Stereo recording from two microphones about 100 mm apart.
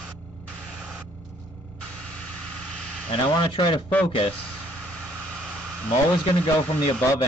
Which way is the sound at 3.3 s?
55° left (ahead or behind).